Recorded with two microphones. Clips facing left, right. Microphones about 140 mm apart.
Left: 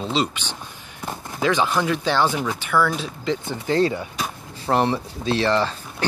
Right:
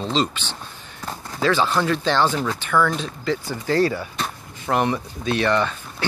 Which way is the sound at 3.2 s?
20° left (ahead or behind).